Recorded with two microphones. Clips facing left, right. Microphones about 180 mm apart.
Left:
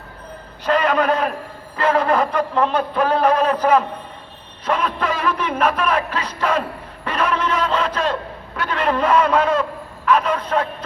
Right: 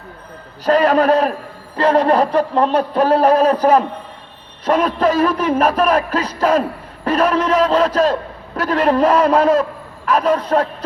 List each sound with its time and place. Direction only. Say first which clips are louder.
0.6 s speech: right 5 dB; 40° right (ahead or behind)